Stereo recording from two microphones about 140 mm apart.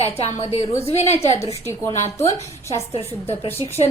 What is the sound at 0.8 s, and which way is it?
Speech, 50° left (ahead or behind).